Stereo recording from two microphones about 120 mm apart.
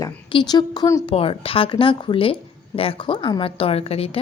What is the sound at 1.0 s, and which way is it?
A woman's voice, 50° left (ahead or behind).